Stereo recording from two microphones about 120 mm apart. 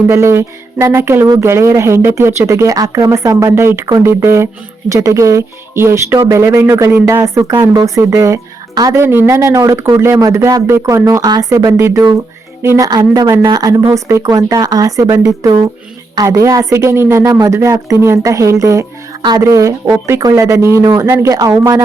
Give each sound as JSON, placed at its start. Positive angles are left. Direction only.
{"t": 0.1, "sound": "speech", "side_deg": -25}